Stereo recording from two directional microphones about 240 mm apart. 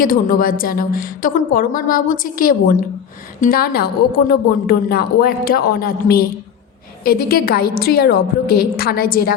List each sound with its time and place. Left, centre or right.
0.0 s a woman's voice: left